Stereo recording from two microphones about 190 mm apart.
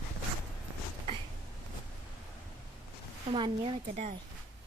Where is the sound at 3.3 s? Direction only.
25° right (ahead or behind).